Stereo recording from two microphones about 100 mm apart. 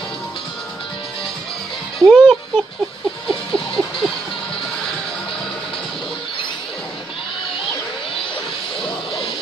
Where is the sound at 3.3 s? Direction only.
5° left (ahead or behind).